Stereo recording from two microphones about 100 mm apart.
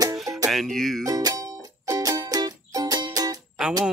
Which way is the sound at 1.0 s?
40° right (ahead or behind).